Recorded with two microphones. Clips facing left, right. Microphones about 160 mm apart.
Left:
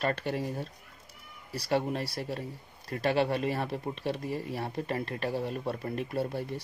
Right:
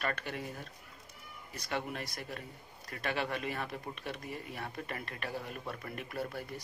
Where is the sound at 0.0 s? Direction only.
30° left (ahead or behind).